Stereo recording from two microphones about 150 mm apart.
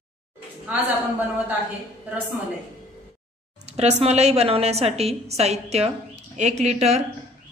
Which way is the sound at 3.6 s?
45° right (ahead or behind).